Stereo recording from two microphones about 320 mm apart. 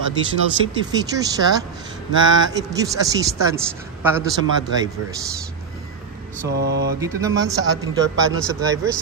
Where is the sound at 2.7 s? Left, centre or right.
Centre.